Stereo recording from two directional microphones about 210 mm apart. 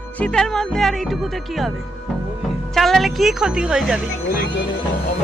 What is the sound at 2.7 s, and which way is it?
Speech, centre (ahead or behind).